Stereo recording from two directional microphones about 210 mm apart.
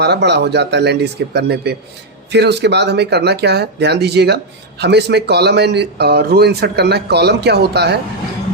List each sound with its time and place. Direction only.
0.0 s speech: 55° right (ahead or behind)